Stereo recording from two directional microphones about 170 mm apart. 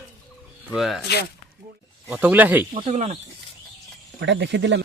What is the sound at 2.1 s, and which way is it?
Speech, 10° right (ahead or behind).